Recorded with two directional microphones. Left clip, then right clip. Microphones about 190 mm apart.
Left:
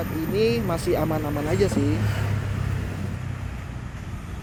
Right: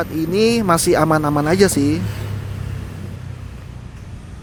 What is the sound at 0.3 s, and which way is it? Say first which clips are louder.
Speech: right 8 dB; 50° right (ahead or behind).